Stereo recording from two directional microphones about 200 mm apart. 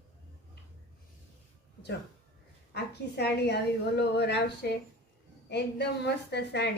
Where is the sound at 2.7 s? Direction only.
55° left (ahead or behind).